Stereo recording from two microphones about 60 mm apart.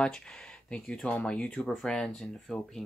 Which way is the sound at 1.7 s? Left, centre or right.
Centre.